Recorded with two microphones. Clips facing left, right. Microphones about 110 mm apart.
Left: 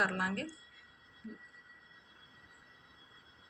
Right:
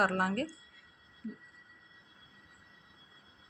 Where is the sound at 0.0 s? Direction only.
50° right (ahead or behind).